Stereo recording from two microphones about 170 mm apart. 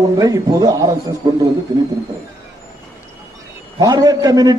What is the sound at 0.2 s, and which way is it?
A man's voice, 20° right (ahead or behind).